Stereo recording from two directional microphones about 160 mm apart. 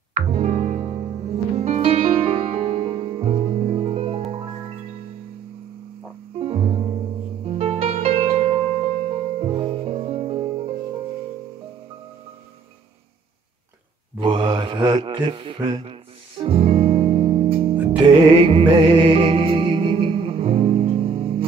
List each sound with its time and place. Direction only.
0.1 s music: 50° right (ahead or behind)
6.3 s music: 40° right (ahead or behind)
14.2 s mantra: 30° right (ahead or behind)
17.8 s music: 35° right (ahead or behind)